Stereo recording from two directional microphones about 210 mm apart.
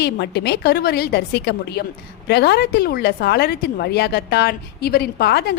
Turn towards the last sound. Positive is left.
turn(degrees=50)  # may be behind; listen again after turning